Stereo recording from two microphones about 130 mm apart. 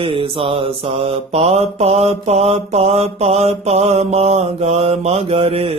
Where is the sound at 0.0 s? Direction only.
45° right (ahead or behind).